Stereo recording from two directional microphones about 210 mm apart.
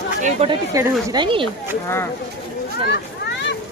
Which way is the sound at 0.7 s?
15° right (ahead or behind).